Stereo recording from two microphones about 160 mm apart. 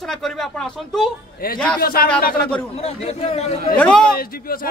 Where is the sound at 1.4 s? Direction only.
65° left (ahead or behind).